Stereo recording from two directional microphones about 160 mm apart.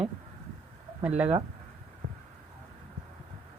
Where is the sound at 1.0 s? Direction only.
5° right (ahead or behind).